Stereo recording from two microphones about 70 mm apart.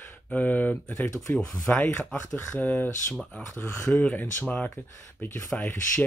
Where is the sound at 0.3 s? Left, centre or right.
Left.